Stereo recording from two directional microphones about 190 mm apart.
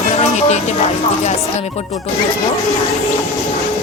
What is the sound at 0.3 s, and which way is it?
Music, 35° left (ahead or behind).